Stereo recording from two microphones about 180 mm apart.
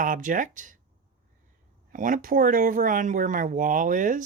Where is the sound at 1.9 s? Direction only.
45° right (ahead or behind).